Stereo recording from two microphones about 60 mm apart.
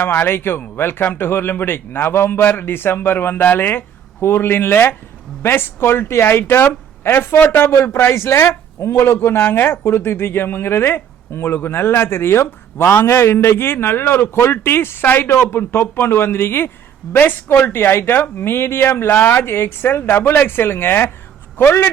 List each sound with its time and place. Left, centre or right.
0.0 s a man's voice: left